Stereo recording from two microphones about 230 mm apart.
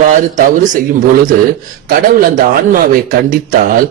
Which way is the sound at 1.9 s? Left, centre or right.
Right.